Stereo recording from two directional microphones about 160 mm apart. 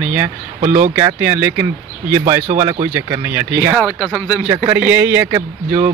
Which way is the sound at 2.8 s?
15° right (ahead or behind).